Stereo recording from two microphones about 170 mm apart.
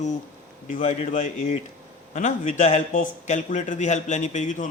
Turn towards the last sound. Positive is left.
turn(degrees=45)  # may be behind; listen again after turning